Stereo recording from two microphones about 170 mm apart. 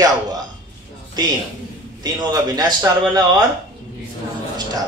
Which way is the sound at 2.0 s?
25° right (ahead or behind).